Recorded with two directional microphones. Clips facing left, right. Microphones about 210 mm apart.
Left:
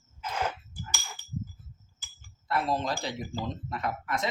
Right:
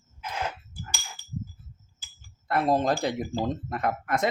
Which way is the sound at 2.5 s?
50° right (ahead or behind).